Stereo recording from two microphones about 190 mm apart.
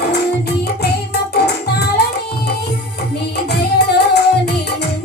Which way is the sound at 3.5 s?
60° left (ahead or behind).